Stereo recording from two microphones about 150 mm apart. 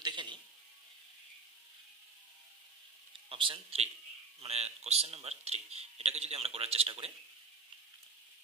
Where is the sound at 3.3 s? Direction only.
35° right (ahead or behind).